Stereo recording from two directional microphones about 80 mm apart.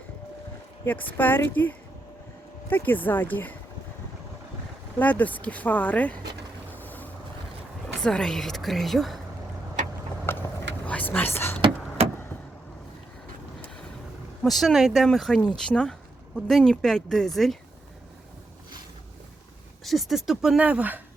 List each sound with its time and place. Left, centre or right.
0.9 s speech: left
4.9 s speech: centre
6.7 s vehicle: left
7.9 s speech: centre
10.8 s a sound: centre
14.4 s speech: centre
19.8 s speech: centre